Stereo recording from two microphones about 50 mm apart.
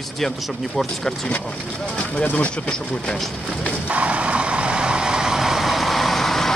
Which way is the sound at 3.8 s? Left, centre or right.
Right.